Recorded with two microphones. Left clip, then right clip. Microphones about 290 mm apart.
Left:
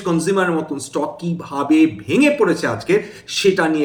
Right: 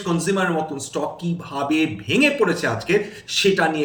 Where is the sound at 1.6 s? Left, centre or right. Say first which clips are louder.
Left 6 dB; centre.